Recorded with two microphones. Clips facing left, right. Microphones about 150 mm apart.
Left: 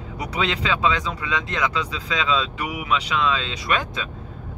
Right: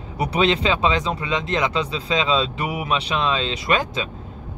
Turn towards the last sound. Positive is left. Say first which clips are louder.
# right 3 dB
turn(degrees=-25)  # may be behind; listen again after turning